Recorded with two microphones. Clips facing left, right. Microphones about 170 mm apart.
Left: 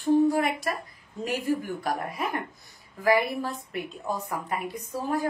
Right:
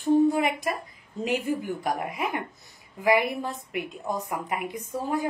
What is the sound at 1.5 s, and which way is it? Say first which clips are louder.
A woman's voice: even; 15° right (ahead or behind).